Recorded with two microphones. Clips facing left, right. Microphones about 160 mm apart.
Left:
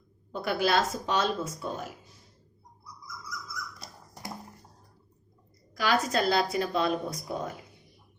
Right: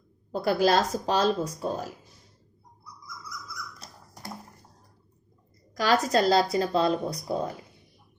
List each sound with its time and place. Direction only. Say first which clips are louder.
0.3 s a woman's voice: right 5 dB; 35° right (ahead or behind)
5.7 s a woman's voice: right 4 dB; 40° right (ahead or behind)